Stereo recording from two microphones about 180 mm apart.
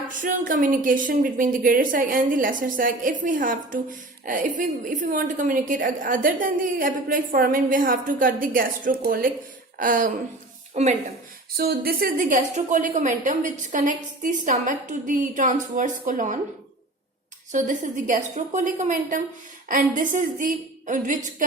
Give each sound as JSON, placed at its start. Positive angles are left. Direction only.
{"t": 0.1, "sound": "speech", "side_deg": -50}
{"t": 11.5, "sound": "speech", "side_deg": -60}
{"t": 17.5, "sound": "speech", "side_deg": -45}